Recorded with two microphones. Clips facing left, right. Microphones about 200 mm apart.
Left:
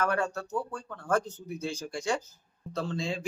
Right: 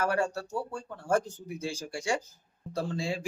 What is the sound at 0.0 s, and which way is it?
Speech, 30° right (ahead or behind).